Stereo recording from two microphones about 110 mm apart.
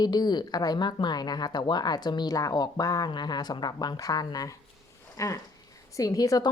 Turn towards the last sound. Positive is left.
turn(degrees=30)  # may be behind; listen again after turning